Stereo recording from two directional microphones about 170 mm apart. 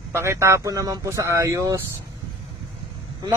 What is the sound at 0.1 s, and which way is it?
Speech, 15° right (ahead or behind).